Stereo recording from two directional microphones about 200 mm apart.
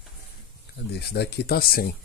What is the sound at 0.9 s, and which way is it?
Speech, 55° left (ahead or behind).